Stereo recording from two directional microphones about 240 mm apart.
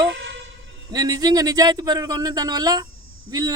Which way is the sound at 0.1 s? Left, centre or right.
Right.